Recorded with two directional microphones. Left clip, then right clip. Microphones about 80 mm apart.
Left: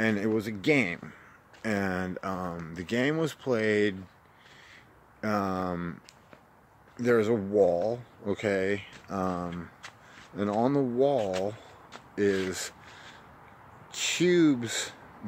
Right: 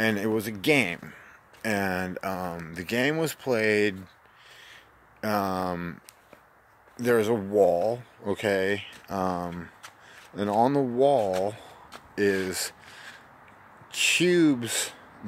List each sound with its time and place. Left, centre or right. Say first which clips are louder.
0.0 s speech: right 2 dB; left
5.2 s speech: right 3 dB; centre
7.0 s speech: right 1 dB; left
10.6 s speech: right 4 dB; centre
11.0 s speech: right 6 dB; centre